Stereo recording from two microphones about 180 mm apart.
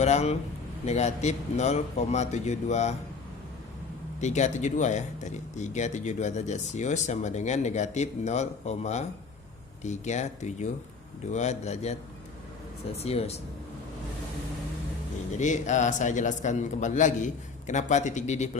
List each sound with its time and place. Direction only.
0.0 s speech: 40° left (ahead or behind)
4.2 s speech: 40° left (ahead or behind)
13.0 s speech: 35° left (ahead or behind)
15.4 s speech: 40° left (ahead or behind)